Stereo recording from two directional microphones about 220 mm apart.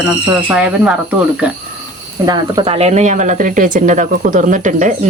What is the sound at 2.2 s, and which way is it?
Speech, 20° right (ahead or behind).